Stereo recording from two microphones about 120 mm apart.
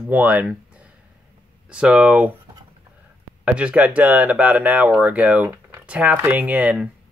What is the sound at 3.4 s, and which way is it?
Speech, 10° right (ahead or behind).